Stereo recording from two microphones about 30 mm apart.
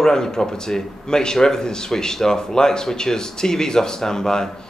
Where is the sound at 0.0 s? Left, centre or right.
Centre.